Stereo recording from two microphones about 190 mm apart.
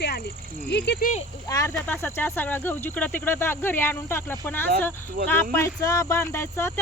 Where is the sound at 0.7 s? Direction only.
60° left (ahead or behind).